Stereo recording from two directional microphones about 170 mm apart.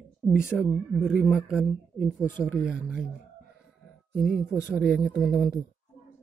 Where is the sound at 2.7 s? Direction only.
50° left (ahead or behind).